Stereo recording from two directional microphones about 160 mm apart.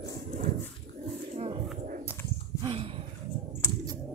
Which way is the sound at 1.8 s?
55° right (ahead or behind).